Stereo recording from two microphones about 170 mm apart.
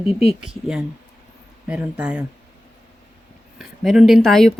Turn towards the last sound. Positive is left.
turn(degrees=0)  # may be behind; listen again after turning